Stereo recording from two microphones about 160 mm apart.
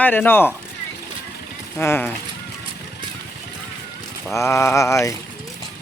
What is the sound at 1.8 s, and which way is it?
Mantra, 15° left (ahead or behind).